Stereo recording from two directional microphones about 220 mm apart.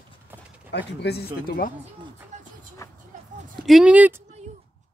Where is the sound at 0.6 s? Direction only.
50° left (ahead or behind).